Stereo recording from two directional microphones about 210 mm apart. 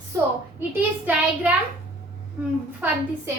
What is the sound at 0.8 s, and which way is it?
Speech, 10° right (ahead or behind).